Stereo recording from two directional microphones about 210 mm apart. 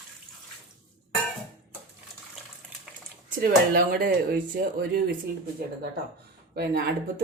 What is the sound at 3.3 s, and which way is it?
Speech, 45° right (ahead or behind).